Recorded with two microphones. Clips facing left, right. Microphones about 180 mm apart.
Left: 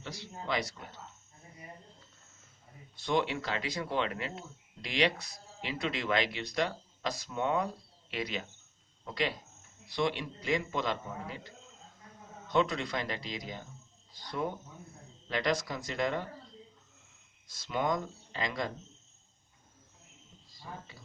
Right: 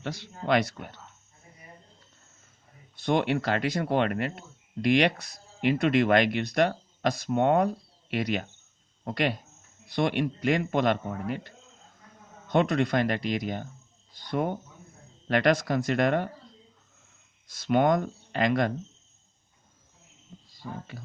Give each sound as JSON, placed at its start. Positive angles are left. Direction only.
{"t": 0.0, "sound": "speech", "side_deg": -65}
{"t": 3.0, "sound": "speech", "side_deg": -60}
{"t": 17.5, "sound": "speech", "side_deg": -65}